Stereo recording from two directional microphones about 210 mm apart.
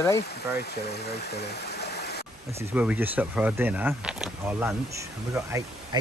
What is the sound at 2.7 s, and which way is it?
Speech, 5° right (ahead or behind).